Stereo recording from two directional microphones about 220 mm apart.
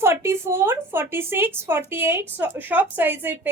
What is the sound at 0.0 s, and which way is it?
A woman's voice, 10° right (ahead or behind).